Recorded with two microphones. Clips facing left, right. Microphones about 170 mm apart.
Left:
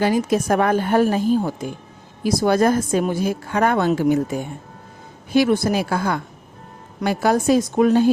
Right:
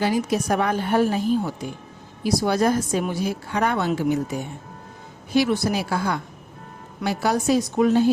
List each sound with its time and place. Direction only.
0.0 s a woman's voice: 50° left (ahead or behind)